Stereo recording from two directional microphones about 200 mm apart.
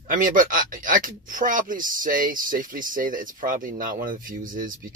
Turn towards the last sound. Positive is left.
turn(degrees=-40)  # may be behind; listen again after turning